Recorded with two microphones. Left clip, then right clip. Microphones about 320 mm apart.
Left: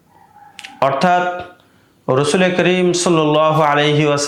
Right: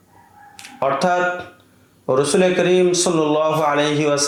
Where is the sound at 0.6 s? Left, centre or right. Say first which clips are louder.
Left 4 dB; left.